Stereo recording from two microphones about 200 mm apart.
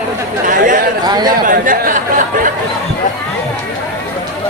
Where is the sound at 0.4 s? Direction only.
40° right (ahead or behind).